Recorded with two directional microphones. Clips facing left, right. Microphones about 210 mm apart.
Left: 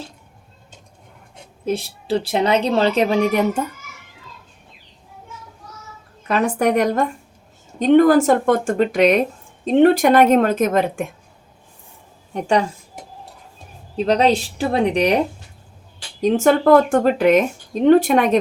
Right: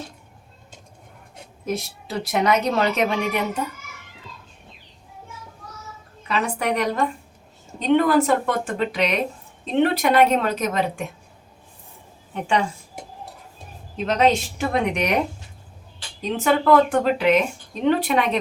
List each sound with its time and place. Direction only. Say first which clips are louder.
1.6 s a woman's voice: left 5 dB; 30° left (ahead or behind)
6.2 s speech: left 6 dB; 45° left (ahead or behind)
12.3 s a woman's voice: left 4 dB; 40° left (ahead or behind)
13.9 s a woman's voice: left 3 dB; 35° left (ahead or behind)
16.2 s speech: left 6 dB; 45° left (ahead or behind)